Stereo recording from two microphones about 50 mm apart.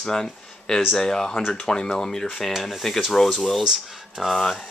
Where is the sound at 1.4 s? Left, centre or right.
Centre.